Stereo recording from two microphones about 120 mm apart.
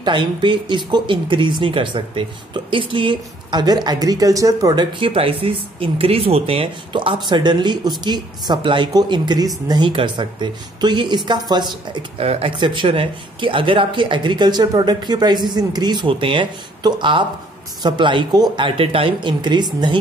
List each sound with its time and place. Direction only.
0.0 s speech: 40° right (ahead or behind)
4.9 s speech: 50° right (ahead or behind)
12.3 s speech: 50° right (ahead or behind)
18.8 s speech: 50° right (ahead or behind)